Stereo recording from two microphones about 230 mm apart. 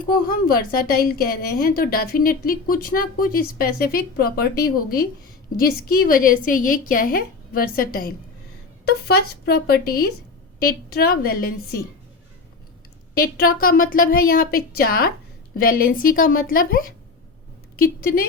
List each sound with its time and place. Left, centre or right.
0.3 s a woman's voice: left
5.5 s a woman's voice: left
13.1 s a woman's voice: left